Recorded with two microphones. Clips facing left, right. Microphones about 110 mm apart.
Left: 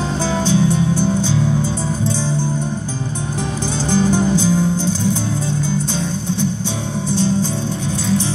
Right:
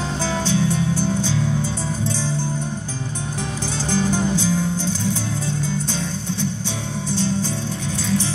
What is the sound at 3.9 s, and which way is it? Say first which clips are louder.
Music: left 5 dB; 20° left (ahead or behind).